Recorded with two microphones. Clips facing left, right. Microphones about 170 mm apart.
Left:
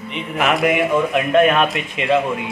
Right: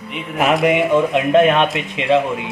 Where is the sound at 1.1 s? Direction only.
25° right (ahead or behind).